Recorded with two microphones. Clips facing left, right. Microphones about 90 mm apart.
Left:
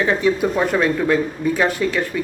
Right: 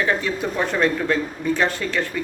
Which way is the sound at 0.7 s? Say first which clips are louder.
Left 3 dB; 5° left (ahead or behind).